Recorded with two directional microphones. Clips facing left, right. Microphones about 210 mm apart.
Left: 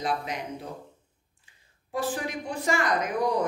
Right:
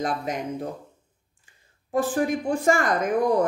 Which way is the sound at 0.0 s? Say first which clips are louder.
Right 3 dB; 45° right (ahead or behind).